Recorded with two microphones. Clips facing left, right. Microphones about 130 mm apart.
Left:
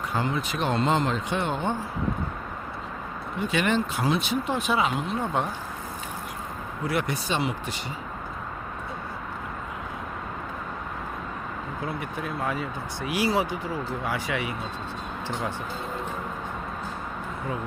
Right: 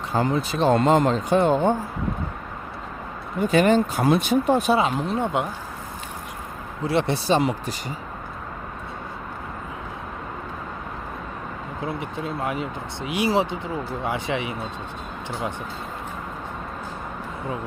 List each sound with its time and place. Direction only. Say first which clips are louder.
0.1 s speech: right 6 dB; 35° right (ahead or behind)
0.7 s speech: right 6 dB; 45° right (ahead or behind)
3.4 s speech: right 7 dB; 40° right (ahead or behind)
5.2 s speech: right 2 dB; 15° right (ahead or behind)
6.8 s speech: right 6 dB; 30° right (ahead or behind)
11.9 s speech: right 4 dB; 25° right (ahead or behind)